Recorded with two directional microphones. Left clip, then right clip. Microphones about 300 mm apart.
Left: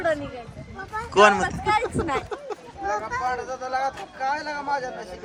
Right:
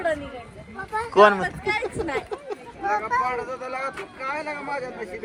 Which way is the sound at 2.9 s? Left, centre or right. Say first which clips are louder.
Right 4 dB; right.